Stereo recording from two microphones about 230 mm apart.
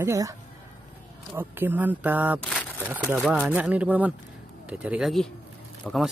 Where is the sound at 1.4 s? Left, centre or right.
Centre.